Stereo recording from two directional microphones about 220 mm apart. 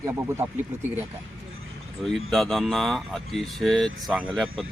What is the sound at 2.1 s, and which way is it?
Speech, centre (ahead or behind).